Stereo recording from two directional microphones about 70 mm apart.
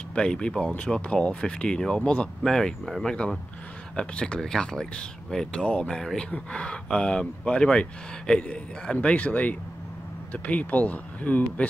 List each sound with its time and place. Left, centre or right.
0.1 s speech: centre